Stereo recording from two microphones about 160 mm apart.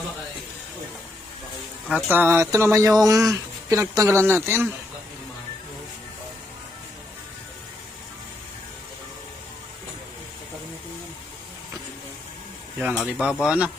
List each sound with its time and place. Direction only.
1.9 s speech: 10° right (ahead or behind)
13.0 s speech: centre (ahead or behind)